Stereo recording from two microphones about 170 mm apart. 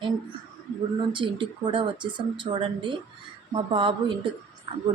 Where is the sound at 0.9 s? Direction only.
30° right (ahead or behind).